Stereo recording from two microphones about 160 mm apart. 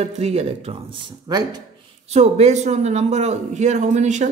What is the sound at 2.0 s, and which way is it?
Speech, 45° right (ahead or behind).